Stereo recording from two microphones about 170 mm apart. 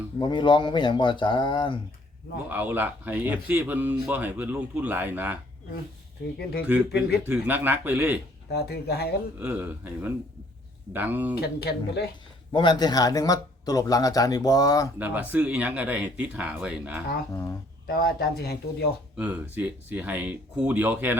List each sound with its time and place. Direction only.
0.2 s speech: 25° left (ahead or behind)
2.5 s speech: 10° right (ahead or behind)
6.7 s speech: 5° right (ahead or behind)
8.5 s speech: 70° left (ahead or behind)
9.4 s speech: 10° right (ahead or behind)
11.3 s speech: 70° left (ahead or behind)
12.5 s speech: 25° left (ahead or behind)
14.9 s speech: 10° right (ahead or behind)
17.3 s speech: 15° left (ahead or behind)
17.8 s speech: 65° left (ahead or behind)
19.1 s speech: 10° right (ahead or behind)